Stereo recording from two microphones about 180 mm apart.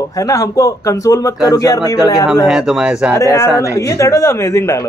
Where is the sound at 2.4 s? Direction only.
5° right (ahead or behind).